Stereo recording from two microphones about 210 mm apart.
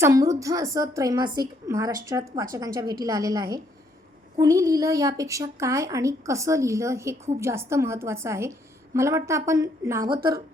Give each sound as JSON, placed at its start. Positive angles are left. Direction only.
{"t": 0.0, "sound": "a woman's voice", "side_deg": -15}